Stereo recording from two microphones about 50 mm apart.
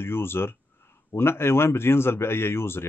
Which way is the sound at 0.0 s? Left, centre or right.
Left.